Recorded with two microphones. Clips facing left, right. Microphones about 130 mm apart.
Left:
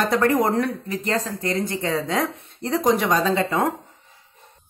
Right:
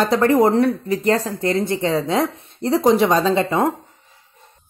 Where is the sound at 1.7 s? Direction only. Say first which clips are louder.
Right 4 dB; 30° right (ahead or behind).